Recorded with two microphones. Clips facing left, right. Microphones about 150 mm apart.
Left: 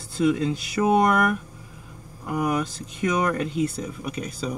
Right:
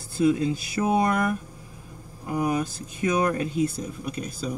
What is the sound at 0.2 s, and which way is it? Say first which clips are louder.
Speech: even; 90° left.